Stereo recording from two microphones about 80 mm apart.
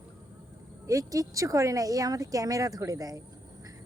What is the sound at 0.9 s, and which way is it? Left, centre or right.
Speech, right.